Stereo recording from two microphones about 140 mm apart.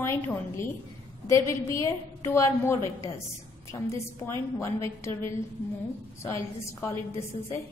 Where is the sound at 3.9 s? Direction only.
20° left (ahead or behind).